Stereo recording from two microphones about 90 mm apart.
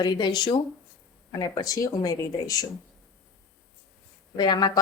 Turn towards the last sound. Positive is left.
turn(degrees=50)  # may be behind; listen again after turning